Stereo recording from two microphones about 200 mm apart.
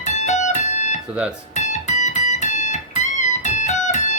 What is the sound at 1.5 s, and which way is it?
Music, 35° left (ahead or behind).